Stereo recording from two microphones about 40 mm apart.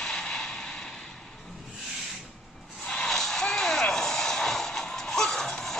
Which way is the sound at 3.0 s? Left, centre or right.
Centre.